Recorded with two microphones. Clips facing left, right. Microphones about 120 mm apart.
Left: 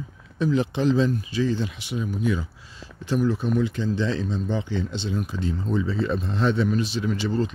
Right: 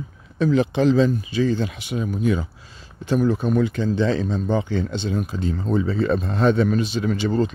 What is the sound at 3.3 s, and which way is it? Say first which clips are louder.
Speech: right 3 dB; 55° right (ahead or behind).